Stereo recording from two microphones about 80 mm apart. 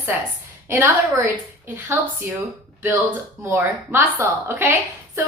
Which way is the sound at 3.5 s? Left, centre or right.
Right.